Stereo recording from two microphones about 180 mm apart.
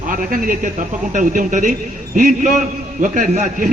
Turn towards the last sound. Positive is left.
turn(degrees=-45)  # may be behind; listen again after turning